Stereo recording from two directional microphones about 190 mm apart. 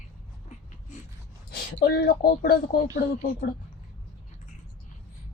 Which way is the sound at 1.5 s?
55° left (ahead or behind).